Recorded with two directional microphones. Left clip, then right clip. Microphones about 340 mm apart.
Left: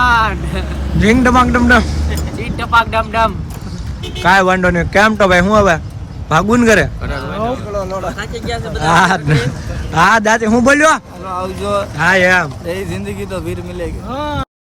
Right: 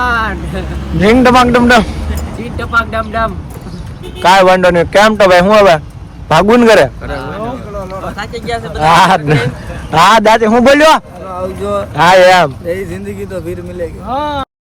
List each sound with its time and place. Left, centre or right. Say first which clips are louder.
0.0 s a man's voice: left 2 dB; centre
7.7 s a sound: left 3 dB; left
8.2 s speech: right 3 dB; centre
8.9 s a man's voice: right 4 dB; centre
12.7 s speech: right 2 dB; centre
14.1 s speech: right 6 dB; centre